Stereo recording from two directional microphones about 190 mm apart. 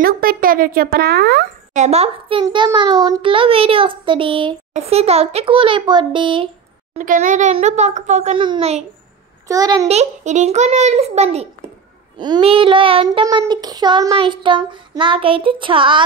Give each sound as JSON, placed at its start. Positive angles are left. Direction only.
{"t": 0.0, "sound": "a woman's voice", "side_deg": -50}
{"t": 1.7, "sound": "a child's voice", "side_deg": -35}
{"t": 7.0, "sound": "a child's voice", "side_deg": -45}
{"t": 9.5, "sound": "a child's voice", "side_deg": -20}
{"t": 9.8, "sound": "a child's voice", "side_deg": -35}